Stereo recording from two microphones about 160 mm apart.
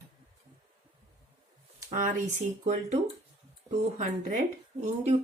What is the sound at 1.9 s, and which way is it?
Speech, 50° right (ahead or behind).